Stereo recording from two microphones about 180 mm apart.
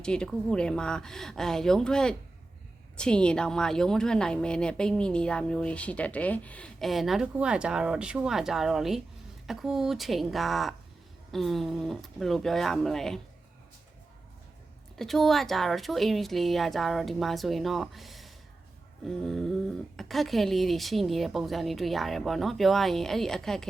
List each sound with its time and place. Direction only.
0.0 s a woman's voice: 5° left (ahead or behind)
14.9 s a woman's voice: centre (ahead or behind)